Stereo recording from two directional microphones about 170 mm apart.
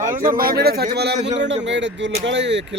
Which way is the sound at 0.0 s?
55° right (ahead or behind).